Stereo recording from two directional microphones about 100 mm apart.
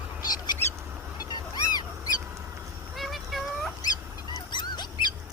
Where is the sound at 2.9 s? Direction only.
Centre (ahead or behind).